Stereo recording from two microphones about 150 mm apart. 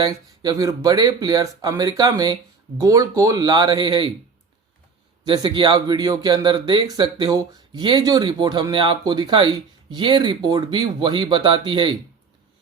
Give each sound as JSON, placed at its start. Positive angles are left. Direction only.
{"t": 0.0, "sound": "speech", "side_deg": -25}
{"t": 5.2, "sound": "speech", "side_deg": -30}